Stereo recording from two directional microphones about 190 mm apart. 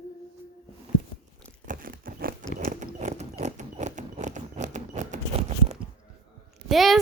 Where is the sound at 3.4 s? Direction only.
40° right (ahead or behind).